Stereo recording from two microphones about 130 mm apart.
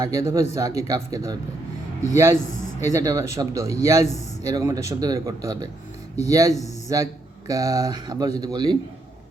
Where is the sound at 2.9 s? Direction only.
25° right (ahead or behind).